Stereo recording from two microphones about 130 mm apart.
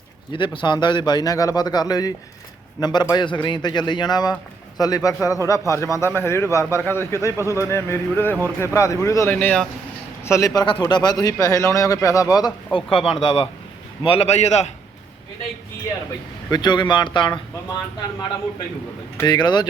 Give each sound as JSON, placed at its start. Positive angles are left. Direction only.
{"t": 0.3, "sound": "a man's voice", "side_deg": 40}
{"t": 9.3, "sound": "speech", "side_deg": 10}
{"t": 10.2, "sound": "a man's voice", "side_deg": 25}
{"t": 12.9, "sound": "a man's voice", "side_deg": 45}
{"t": 16.5, "sound": "a man's voice", "side_deg": 35}
{"t": 19.2, "sound": "a man's voice", "side_deg": 35}